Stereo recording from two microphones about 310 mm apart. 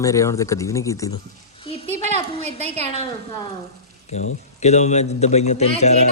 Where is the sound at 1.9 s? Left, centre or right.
Right.